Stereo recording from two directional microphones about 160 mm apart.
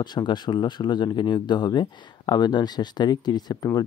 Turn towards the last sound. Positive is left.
turn(degrees=25)  # may be behind; listen again after turning